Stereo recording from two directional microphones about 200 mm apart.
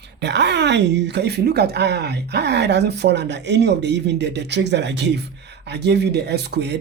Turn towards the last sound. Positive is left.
turn(degrees=-55)  # may be behind; listen again after turning